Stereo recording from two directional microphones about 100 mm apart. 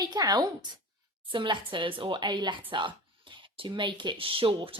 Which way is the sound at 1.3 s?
55° right (ahead or behind).